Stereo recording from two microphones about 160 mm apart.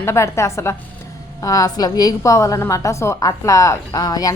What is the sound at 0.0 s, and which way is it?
A woman's voice, 15° left (ahead or behind).